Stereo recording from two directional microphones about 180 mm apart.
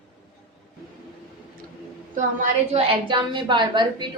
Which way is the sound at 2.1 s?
45° right (ahead or behind).